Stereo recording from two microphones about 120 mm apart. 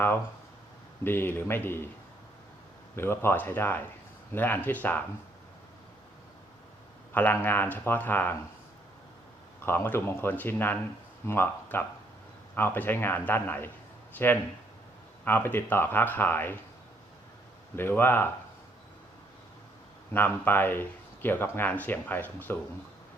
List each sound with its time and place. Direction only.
1.0 s speech: 20° left (ahead or behind)
2.9 s speech: 20° left (ahead or behind)
7.1 s speech: 15° left (ahead or behind)
9.6 s speech: 15° left (ahead or behind)
17.7 s speech: 20° left (ahead or behind)
20.1 s speech: 15° left (ahead or behind)